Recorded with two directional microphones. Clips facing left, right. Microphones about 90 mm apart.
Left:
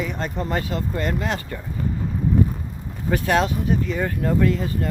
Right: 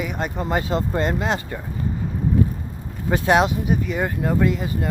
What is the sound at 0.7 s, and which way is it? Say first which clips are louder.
Speech: right 3 dB; 25° right (ahead or behind).